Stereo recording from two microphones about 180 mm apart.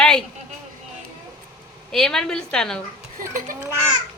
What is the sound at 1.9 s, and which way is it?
Speech, 5° left (ahead or behind).